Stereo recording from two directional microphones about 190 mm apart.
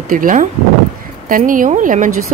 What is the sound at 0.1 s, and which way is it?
A woman's voice, 45° right (ahead or behind).